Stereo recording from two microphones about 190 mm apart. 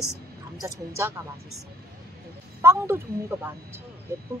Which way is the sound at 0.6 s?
15° right (ahead or behind).